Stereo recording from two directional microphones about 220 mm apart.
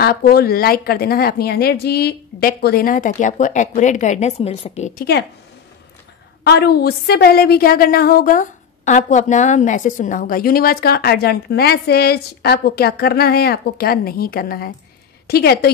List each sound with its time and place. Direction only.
0.0 s a woman's voice: 45° left (ahead or behind)
6.4 s a woman's voice: 50° left (ahead or behind)